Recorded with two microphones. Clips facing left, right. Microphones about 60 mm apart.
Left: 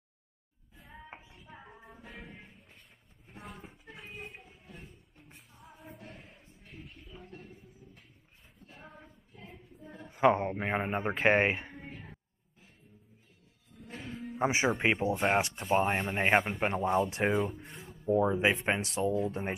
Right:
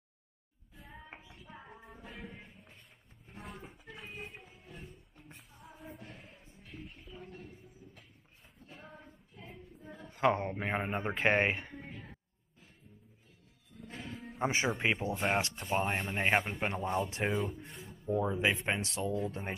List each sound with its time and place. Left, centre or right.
0.7 s music: centre
3.3 s a sound: centre
5.3 s music: centre
8.7 s a sound: centre
9.9 s speech: centre
13.8 s music: centre
14.3 s speech: left
15.6 s speech: centre
18.1 s speech: centre
18.9 s speech: centre